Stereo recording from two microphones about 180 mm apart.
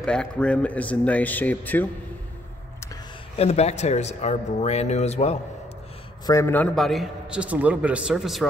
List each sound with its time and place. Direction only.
0.0 s speech: 5° left (ahead or behind)
3.3 s speech: 35° left (ahead or behind)
6.2 s a man's voice: 15° left (ahead or behind); by 8.5 s centre (ahead or behind)